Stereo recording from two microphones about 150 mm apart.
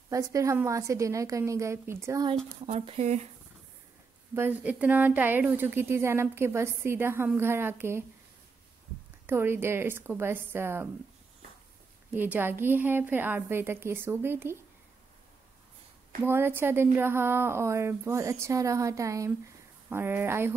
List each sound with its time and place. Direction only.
0.1 s a woman's voice: 20° right (ahead or behind)
2.6 s speech: 45° right (ahead or behind)
4.4 s a woman's voice: 10° right (ahead or behind)
9.2 s a woman's voice: 15° right (ahead or behind)
12.1 s a woman's voice: 10° right (ahead or behind)
16.3 s a woman's voice: 15° right (ahead or behind)